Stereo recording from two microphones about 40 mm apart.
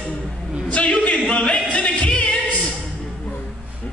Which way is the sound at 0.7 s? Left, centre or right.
Left.